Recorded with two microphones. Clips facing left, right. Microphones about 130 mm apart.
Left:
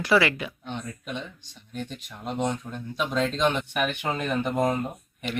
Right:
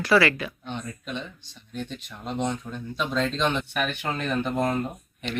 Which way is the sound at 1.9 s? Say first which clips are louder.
Even; 10° left (ahead or behind).